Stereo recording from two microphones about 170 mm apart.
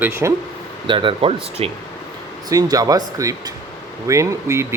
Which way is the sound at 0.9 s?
30° right (ahead or behind).